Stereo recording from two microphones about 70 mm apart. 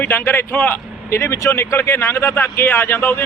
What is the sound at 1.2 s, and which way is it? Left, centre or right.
Speech, left.